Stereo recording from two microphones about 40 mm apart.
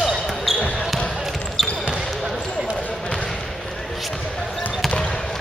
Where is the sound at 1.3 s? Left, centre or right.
Centre.